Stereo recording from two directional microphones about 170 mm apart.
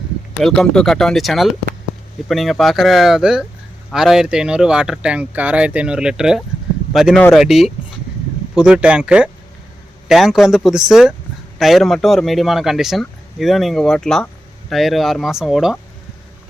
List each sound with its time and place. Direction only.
0.4 s speech: 5° left (ahead or behind)